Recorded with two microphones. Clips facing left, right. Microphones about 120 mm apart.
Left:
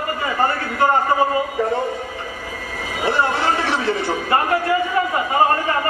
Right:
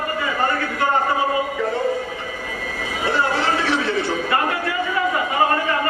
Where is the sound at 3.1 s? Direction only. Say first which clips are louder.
Left 1 dB; 25° left (ahead or behind).